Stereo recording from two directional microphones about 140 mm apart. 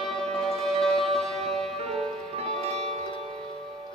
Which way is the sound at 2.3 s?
50° right (ahead or behind).